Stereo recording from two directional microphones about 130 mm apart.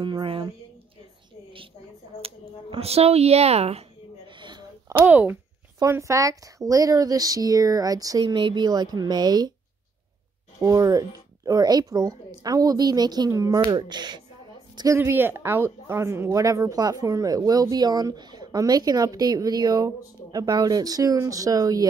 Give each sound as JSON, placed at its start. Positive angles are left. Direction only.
{"t": 0.0, "sound": "speech", "side_deg": -40}
{"t": 2.2, "sound": "speech", "side_deg": -50}
{"t": 4.3, "sound": "a sound", "side_deg": -35}
{"t": 4.9, "sound": "speech", "side_deg": -15}
{"t": 10.6, "sound": "a woman's voice", "side_deg": -30}
{"t": 15.0, "sound": "speech", "side_deg": -15}